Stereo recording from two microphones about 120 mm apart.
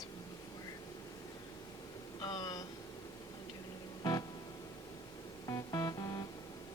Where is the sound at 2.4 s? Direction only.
30° left (ahead or behind).